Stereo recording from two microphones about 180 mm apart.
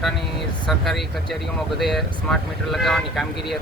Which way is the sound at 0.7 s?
Centre (ahead or behind).